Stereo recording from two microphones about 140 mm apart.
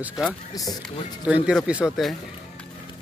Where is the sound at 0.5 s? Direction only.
25° left (ahead or behind).